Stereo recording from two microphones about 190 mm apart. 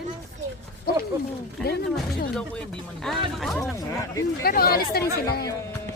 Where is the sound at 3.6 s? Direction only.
15° left (ahead or behind).